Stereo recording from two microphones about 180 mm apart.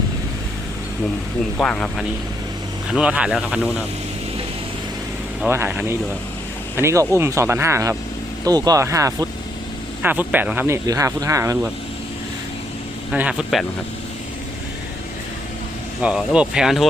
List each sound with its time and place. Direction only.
1.5 s speech: 5° left (ahead or behind)
2.9 s speech: 5° right (ahead or behind)
5.5 s speech: 10° right (ahead or behind)
13.1 s speech: 5° right (ahead or behind)
16.0 s speech: 5° right (ahead or behind)